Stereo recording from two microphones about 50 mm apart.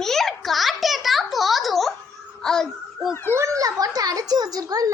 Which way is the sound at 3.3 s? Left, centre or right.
Right.